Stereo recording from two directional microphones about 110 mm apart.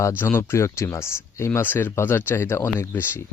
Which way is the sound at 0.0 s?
20° left (ahead or behind).